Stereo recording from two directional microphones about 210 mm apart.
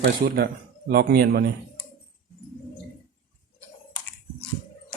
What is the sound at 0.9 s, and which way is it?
Speech, 45° right (ahead or behind).